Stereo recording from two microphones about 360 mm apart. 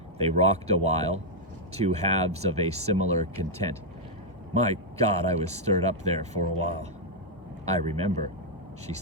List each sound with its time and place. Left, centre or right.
0.2 s speech: centre
7.8 s speech: centre